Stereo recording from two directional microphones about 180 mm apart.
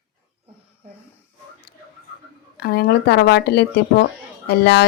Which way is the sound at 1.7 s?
65° left (ahead or behind).